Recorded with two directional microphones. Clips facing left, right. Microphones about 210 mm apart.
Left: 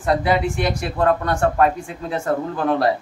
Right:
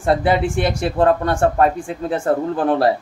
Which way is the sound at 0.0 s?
30° right (ahead or behind).